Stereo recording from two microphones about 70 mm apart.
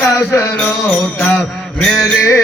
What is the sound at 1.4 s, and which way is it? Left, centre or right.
Mantra, centre.